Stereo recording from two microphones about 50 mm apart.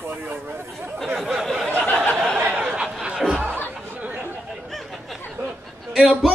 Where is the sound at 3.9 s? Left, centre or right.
Right.